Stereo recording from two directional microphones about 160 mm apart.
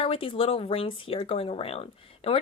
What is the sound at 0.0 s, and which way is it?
A woman's voice, 35° left (ahead or behind).